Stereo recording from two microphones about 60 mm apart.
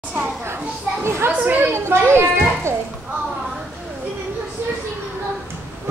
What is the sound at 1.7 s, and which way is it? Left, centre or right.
A child's voice, right.